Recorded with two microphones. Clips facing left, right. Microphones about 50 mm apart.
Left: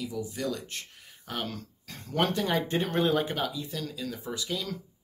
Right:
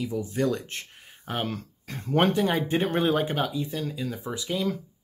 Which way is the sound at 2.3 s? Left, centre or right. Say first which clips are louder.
Right 4 dB; centre.